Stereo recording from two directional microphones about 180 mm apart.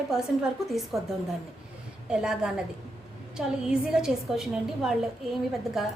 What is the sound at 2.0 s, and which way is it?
A woman's voice, 5° right (ahead or behind).